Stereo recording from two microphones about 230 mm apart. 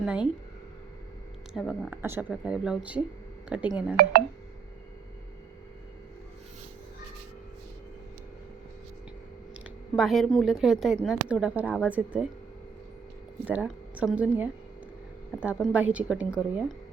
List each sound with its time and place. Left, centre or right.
0.0 s speech: centre
1.5 s speech: centre
4.0 s speech: right
9.9 s speech: centre
13.4 s speech: centre